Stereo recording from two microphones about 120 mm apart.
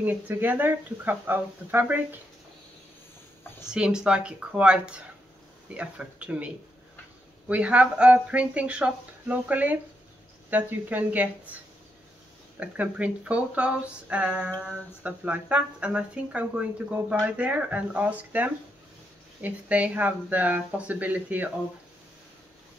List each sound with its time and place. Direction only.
0.0 s speech: 15° right (ahead or behind)
3.6 s speech: 5° right (ahead or behind)
12.5 s speech: 10° right (ahead or behind)